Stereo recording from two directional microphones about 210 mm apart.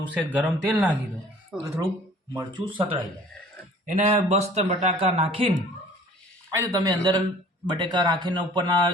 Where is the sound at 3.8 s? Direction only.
35° right (ahead or behind).